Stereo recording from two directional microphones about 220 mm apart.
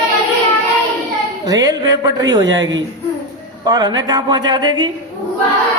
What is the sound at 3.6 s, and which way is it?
Speech, 20° right (ahead or behind).